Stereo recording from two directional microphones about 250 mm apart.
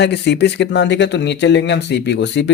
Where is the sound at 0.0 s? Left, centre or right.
Left.